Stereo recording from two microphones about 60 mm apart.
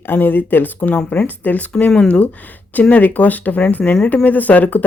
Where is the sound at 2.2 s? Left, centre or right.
Left.